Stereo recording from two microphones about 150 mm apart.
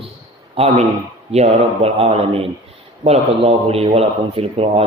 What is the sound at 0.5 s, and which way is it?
Speech, 40° right (ahead or behind).